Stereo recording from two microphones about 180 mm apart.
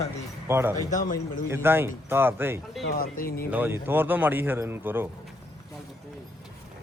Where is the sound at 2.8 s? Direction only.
55° left (ahead or behind).